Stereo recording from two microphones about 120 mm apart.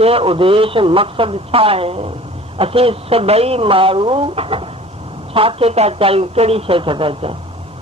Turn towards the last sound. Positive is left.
turn(degrees=-50)  # may be behind; listen again after turning